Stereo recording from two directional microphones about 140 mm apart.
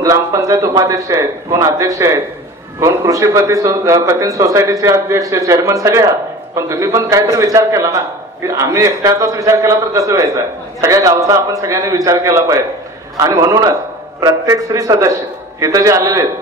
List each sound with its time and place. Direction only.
0.0 s a man's voice: 25° right (ahead or behind)